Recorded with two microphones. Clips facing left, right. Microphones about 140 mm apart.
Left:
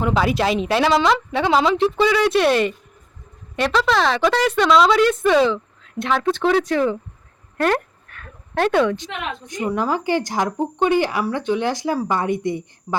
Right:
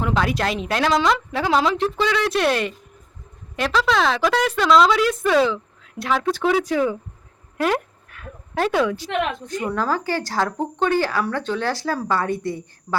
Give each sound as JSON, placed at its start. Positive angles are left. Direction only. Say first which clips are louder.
{"t": 0.0, "sound": "speech", "louder": "left 3 dB", "side_deg": 5}
{"t": 7.5, "sound": "a sound", "louder": "left 2 dB", "side_deg": -5}
{"t": 9.5, "sound": "speech", "louder": "left 1 dB", "side_deg": 15}